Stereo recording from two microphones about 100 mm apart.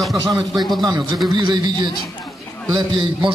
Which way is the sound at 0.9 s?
40° right (ahead or behind).